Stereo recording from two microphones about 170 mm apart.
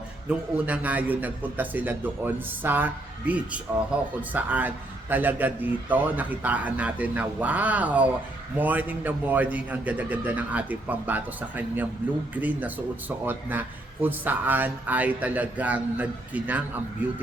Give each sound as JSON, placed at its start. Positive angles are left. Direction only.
{"t": 0.3, "sound": "a man's voice", "side_deg": -10}